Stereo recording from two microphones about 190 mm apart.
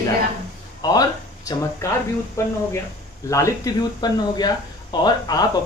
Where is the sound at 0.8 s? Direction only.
20° left (ahead or behind).